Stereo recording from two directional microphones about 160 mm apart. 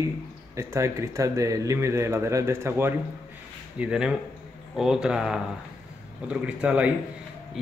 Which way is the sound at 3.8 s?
5° right (ahead or behind).